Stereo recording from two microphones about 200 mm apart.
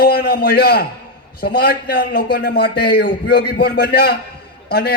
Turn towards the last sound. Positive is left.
turn(degrees=50)  # may be behind; listen again after turning